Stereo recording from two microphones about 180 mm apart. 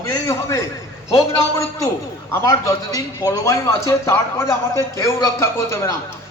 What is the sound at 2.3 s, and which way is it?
A man's voice, 15° left (ahead or behind).